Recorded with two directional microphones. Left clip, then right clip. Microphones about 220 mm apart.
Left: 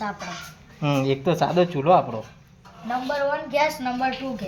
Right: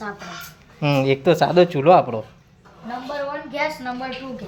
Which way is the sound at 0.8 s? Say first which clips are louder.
Right 4 dB; 15° right (ahead or behind).